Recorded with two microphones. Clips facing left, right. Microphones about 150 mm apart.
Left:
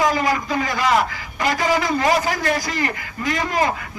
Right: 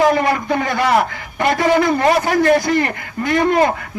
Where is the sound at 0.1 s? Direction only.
60° right (ahead or behind).